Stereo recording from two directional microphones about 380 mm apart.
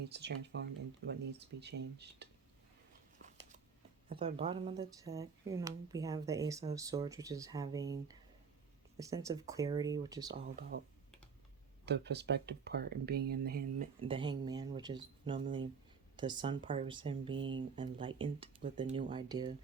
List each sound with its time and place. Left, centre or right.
0.0 s speech: right
4.1 s speech: centre
10.7 s speech: right